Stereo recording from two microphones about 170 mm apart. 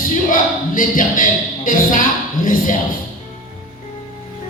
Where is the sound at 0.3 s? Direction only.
50° left (ahead or behind).